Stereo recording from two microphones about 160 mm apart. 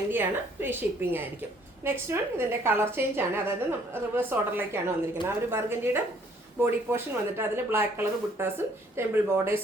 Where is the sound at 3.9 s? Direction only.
15° right (ahead or behind).